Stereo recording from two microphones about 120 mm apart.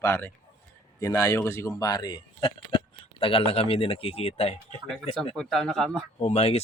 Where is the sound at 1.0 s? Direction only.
30° left (ahead or behind); by 4.6 s 55° left (ahead or behind).